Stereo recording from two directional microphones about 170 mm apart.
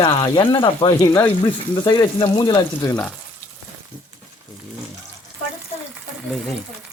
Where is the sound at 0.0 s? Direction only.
30° left (ahead or behind).